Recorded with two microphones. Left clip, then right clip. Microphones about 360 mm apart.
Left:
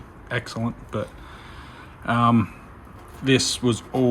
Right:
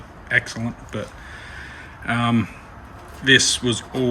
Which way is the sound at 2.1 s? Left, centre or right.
Centre.